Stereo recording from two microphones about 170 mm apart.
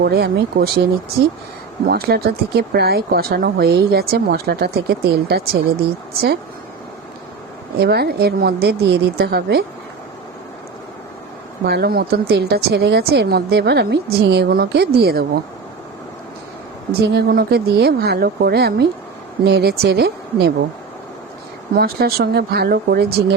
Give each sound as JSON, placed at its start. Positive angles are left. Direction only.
{"t": 0.0, "sound": "speech", "side_deg": -70}
{"t": 1.9, "sound": "speech", "side_deg": -65}
{"t": 7.8, "sound": "speech", "side_deg": -70}
{"t": 11.6, "sound": "speech", "side_deg": -70}
{"t": 17.0, "sound": "speech", "side_deg": -75}
{"t": 21.8, "sound": "speech", "side_deg": -65}